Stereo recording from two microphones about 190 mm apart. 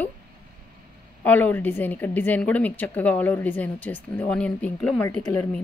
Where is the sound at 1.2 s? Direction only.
10° left (ahead or behind).